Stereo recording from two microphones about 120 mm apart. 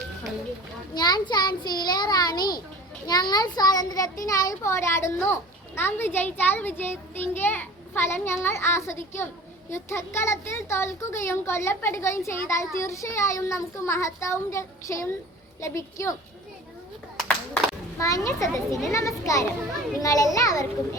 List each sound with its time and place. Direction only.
0.9 s a child's voice: 35° left (ahead or behind)
17.2 s clapping: 5° left (ahead or behind)
18.0 s a child's voice: 25° left (ahead or behind)